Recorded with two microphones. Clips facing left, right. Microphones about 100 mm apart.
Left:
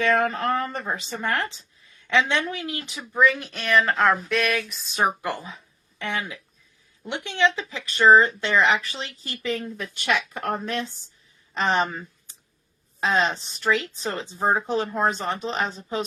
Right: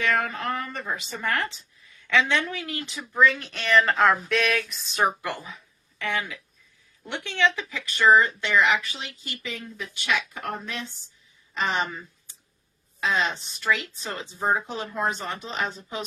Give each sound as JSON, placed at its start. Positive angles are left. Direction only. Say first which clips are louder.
{"t": 0.0, "sound": "speech", "louder": "left 4 dB", "side_deg": 35}
{"t": 1.2, "sound": "a woman's voice", "louder": "even", "side_deg": 20}
{"t": 4.9, "sound": "speech", "louder": "left 1 dB", "side_deg": 20}
{"t": 7.9, "sound": "speech", "louder": "left 3 dB", "side_deg": 30}